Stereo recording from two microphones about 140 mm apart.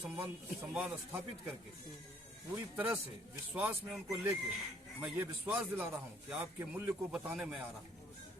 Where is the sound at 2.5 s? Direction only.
10° right (ahead or behind).